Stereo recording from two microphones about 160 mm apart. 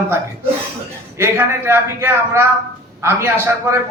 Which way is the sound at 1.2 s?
15° right (ahead or behind).